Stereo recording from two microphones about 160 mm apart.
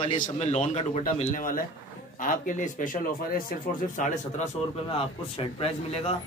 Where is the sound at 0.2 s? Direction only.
45° left (ahead or behind); by 4.0 s 65° left (ahead or behind).